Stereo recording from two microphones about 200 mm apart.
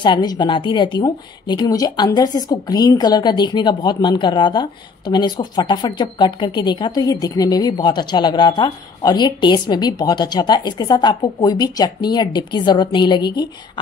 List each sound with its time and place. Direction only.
0.0 s a woman's voice: 20° left (ahead or behind)